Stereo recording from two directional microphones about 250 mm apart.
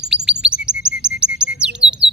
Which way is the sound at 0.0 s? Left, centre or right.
Centre.